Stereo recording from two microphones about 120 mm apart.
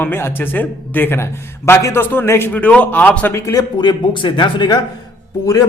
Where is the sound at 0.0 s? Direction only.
20° left (ahead or behind); by 4.8 s 40° left (ahead or behind).